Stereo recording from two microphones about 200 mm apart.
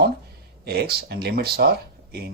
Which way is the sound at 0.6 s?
55° right (ahead or behind).